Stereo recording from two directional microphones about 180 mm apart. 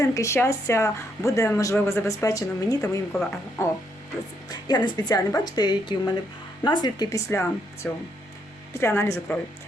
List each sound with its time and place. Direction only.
0.0 s speech: 15° left (ahead or behind)